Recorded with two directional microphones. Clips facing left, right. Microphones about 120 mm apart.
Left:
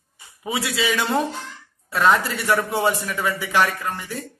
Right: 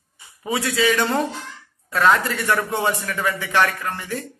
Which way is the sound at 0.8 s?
15° left (ahead or behind).